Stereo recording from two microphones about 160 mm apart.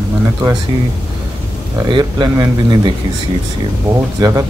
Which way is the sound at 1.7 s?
25° right (ahead or behind).